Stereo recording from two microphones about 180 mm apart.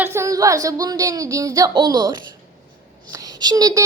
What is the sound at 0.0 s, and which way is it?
A child's voice, 15° right (ahead or behind).